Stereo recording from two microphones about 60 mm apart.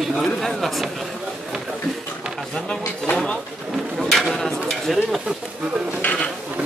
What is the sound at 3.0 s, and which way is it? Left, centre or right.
Speech, centre.